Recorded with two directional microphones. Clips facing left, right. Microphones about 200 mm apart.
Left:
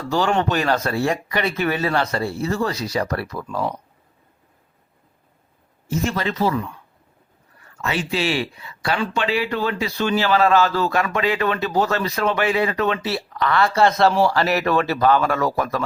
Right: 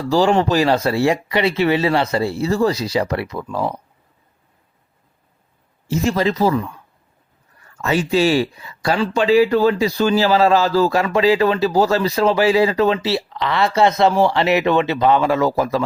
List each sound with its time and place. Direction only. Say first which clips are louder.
0.1 s speech: right 5 dB; 30° right (ahead or behind)
3.0 s speech: right 3 dB; 25° right (ahead or behind)
5.9 s speech: right 5 dB; 35° right (ahead or behind)
7.8 s speech: right 7 dB; 40° right (ahead or behind)